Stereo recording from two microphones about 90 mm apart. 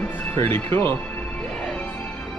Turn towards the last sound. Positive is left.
turn(degrees=25)  # may be behind; listen again after turning